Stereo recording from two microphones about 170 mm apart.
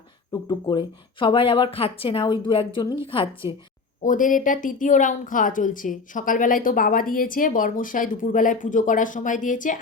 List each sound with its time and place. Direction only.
0.3 s a woman's voice: 25° left (ahead or behind)
4.0 s speech: 50° left (ahead or behind)